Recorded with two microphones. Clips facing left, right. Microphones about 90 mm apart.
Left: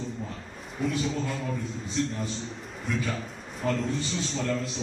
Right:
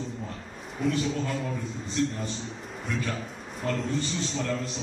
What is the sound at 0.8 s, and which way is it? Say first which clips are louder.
Speech: right 1 dB; centre (ahead or behind).